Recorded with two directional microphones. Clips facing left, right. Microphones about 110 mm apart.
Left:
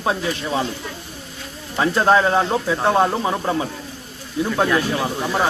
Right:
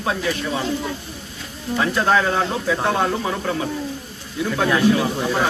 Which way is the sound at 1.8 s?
30° left (ahead or behind).